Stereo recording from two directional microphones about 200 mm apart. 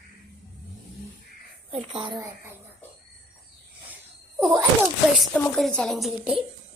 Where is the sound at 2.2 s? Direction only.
10° right (ahead or behind).